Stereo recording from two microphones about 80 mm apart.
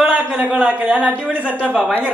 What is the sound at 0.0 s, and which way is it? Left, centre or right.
A man's voice, centre.